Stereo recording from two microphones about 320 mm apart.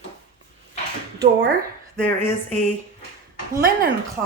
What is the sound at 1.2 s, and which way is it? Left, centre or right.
Speech, right.